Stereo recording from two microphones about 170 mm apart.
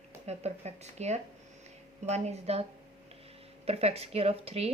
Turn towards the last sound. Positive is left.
turn(degrees=-35)  # may be behind; listen again after turning